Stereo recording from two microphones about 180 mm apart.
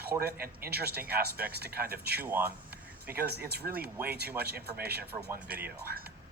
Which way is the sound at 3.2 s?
65° right (ahead or behind).